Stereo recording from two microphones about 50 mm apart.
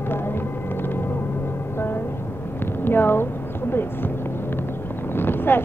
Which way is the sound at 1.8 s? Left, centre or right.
Left.